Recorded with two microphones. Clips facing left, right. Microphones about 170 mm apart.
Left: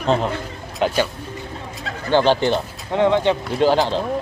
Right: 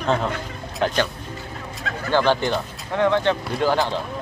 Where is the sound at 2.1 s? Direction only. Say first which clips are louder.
Left 3 dB; 20° left (ahead or behind).